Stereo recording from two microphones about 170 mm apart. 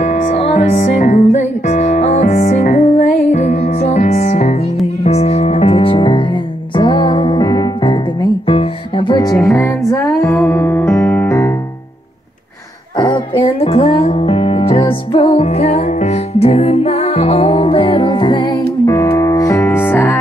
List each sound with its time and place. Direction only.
0.0 s music: 40° left (ahead or behind); by 11.5 s 15° left (ahead or behind)
12.9 s music: 25° left (ahead or behind)